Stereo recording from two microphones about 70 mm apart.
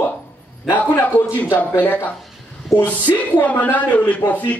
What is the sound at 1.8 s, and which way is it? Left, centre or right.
Speech, left.